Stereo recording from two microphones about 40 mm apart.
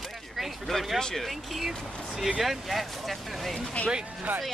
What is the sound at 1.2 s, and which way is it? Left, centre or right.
Speech, centre.